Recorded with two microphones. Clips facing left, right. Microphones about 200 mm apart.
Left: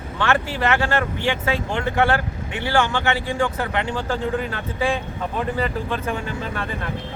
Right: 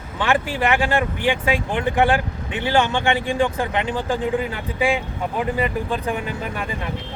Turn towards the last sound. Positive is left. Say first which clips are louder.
# right 1 dB
turn(degrees=-15)  # may be behind; listen again after turning